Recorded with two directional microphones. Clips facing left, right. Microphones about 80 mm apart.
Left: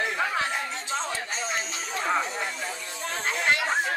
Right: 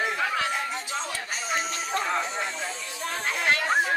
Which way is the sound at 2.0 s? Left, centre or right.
Centre.